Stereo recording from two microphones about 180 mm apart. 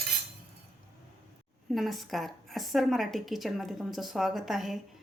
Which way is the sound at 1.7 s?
Centre (ahead or behind).